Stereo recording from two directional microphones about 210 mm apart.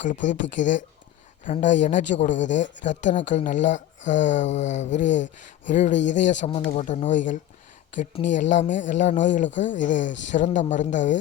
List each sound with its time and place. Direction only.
0.0 s speech: 35° left (ahead or behind)